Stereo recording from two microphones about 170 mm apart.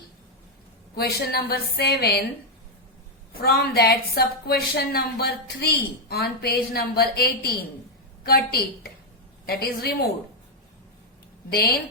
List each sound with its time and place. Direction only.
0.9 s a woman's voice: 70° left (ahead or behind)
3.4 s a woman's voice: 65° left (ahead or behind)